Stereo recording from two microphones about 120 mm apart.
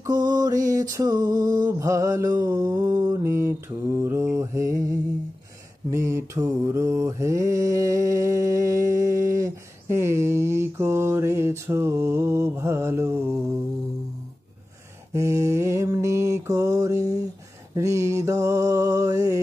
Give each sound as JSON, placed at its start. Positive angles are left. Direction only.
{"t": 0.0, "sound": "mantra", "side_deg": -30}
{"t": 15.1, "sound": "mantra", "side_deg": -25}